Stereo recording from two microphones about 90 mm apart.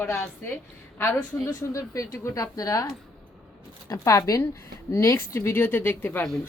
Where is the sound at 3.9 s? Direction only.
35° left (ahead or behind).